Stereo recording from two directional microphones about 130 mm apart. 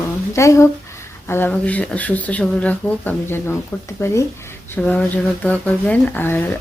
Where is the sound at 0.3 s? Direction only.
25° left (ahead or behind).